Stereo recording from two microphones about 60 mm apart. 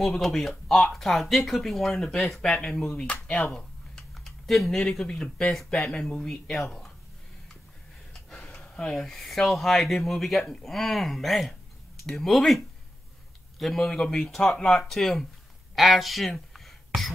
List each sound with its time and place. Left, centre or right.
0.0 s speech: centre
3.3 s speech: left
3.5 s a sound: centre
5.0 s speech: centre
8.1 s speech: centre
15.7 s a sound: centre